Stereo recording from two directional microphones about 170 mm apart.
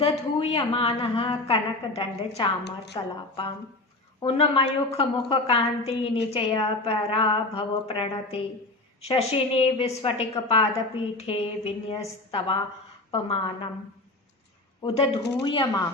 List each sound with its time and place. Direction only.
0.0 s a woman's voice: 35° left (ahead or behind)
4.2 s a woman's voice: 30° left (ahead or behind)
14.8 s a woman's voice: 40° left (ahead or behind)
15.4 s speech: 25° left (ahead or behind)